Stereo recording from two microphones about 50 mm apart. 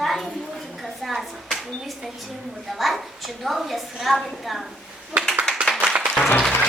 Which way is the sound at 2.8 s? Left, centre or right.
Centre.